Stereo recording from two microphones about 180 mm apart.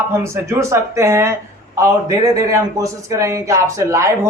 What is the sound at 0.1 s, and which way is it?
Speech, 15° right (ahead or behind).